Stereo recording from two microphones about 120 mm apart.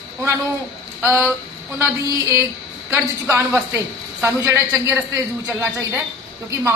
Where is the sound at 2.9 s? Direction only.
15° right (ahead or behind).